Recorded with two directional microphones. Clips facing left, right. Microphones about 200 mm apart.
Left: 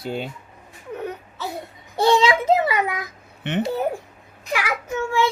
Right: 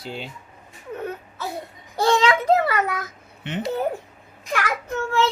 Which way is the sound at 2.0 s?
15° left (ahead or behind).